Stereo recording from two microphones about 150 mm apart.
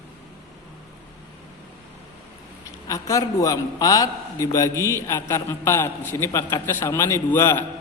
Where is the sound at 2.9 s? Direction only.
20° left (ahead or behind).